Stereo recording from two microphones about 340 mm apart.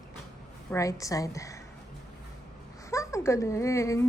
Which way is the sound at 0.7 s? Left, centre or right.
Centre.